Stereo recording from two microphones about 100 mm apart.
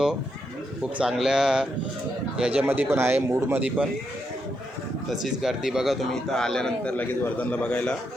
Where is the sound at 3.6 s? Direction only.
10° right (ahead or behind).